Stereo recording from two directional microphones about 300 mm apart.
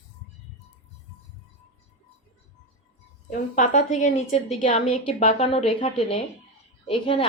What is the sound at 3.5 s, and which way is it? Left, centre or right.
A woman's voice, left.